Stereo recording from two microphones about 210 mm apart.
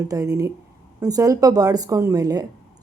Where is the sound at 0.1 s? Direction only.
15° right (ahead or behind).